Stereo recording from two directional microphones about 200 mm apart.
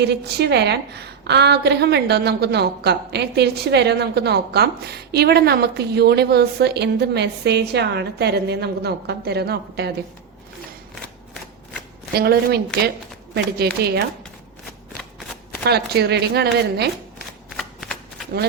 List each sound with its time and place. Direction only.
0.0 s a woman's voice: 55° right (ahead or behind)
12.1 s a woman's voice: 50° right (ahead or behind)
15.6 s a woman's voice: 55° right (ahead or behind)
17.6 s shuffling cards: centre (ahead or behind)